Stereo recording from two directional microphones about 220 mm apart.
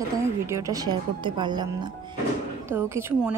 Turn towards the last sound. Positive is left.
turn(degrees=-10)  # may be behind; listen again after turning